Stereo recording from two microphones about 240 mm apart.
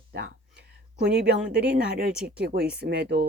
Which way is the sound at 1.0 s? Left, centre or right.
Right.